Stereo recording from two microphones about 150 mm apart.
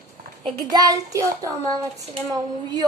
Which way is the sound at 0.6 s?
25° right (ahead or behind).